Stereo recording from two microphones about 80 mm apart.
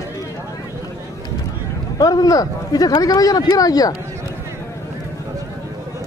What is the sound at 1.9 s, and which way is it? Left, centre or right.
Speech, left.